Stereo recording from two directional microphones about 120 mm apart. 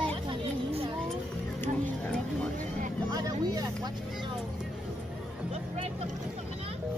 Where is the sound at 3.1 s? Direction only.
30° right (ahead or behind).